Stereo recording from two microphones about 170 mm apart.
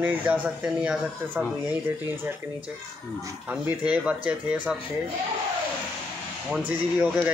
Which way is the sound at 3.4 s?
10° right (ahead or behind).